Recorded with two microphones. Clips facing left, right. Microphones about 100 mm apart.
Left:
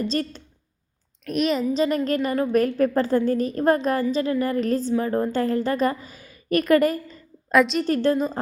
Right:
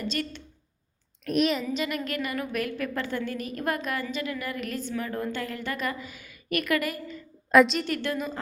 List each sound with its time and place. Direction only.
0.0 s a woman's voice: 35° left (ahead or behind)
1.2 s a woman's voice: centre (ahead or behind)
1.7 s a woman's voice: 35° left (ahead or behind)
7.5 s a woman's voice: centre (ahead or behind)
7.9 s a woman's voice: 35° left (ahead or behind)